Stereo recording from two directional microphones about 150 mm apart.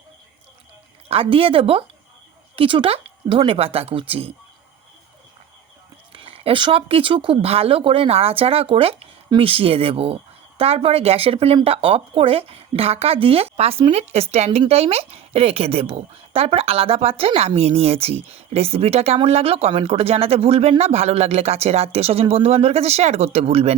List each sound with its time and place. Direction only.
1.0 s speech: 40° right (ahead or behind)
6.1 s a woman's voice: 40° right (ahead or behind)